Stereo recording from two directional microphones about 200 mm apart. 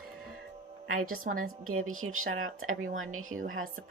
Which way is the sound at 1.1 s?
45° right (ahead or behind).